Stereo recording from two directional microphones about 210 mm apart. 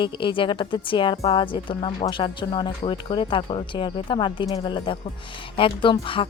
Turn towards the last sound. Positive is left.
turn(degrees=25)  # may be behind; listen again after turning